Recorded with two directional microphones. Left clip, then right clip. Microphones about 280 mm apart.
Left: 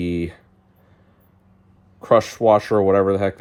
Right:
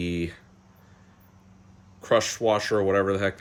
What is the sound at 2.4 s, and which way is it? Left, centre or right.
Speech, left.